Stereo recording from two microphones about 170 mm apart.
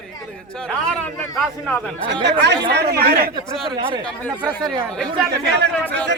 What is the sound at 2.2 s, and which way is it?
Speech, 90° right.